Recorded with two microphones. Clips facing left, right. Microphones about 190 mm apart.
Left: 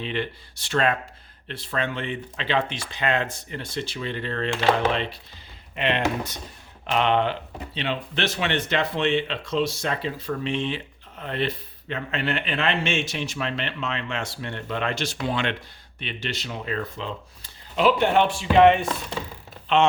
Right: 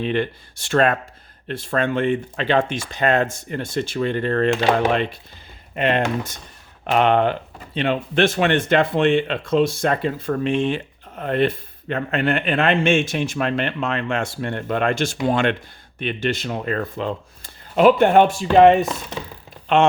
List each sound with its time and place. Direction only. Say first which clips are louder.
0.0 s speech: right 7 dB; 50° right (ahead or behind)
19.6 s speech: right 4 dB; 50° right (ahead or behind)